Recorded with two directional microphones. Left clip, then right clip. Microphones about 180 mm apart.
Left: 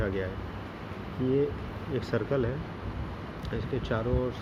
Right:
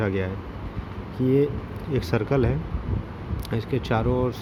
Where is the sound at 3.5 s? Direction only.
50° right (ahead or behind).